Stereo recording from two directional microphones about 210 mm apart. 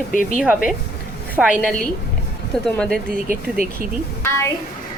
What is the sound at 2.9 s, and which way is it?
Speech, 45° right (ahead or behind).